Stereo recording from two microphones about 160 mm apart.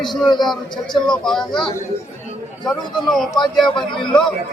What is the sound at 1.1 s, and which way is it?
A man's voice, 5° left (ahead or behind).